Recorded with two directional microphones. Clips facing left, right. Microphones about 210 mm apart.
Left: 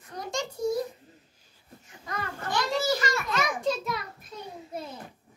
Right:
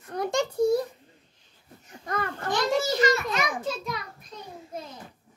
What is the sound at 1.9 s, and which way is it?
Babbling, 50° right (ahead or behind).